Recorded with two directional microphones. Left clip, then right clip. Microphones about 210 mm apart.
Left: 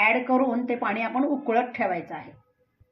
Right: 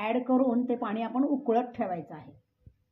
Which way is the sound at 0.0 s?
40° right (ahead or behind).